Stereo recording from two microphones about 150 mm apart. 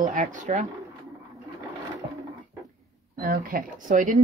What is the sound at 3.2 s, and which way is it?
Speech, 70° right (ahead or behind).